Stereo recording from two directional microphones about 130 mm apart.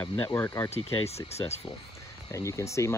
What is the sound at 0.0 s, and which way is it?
Speech, 20° left (ahead or behind).